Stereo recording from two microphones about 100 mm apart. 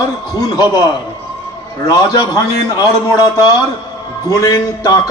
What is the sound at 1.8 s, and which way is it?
Speech, 35° left (ahead or behind).